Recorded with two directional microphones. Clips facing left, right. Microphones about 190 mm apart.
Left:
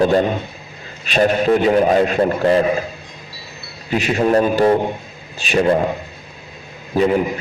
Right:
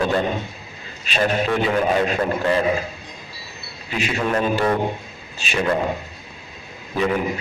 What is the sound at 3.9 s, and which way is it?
A man's voice, 40° left (ahead or behind).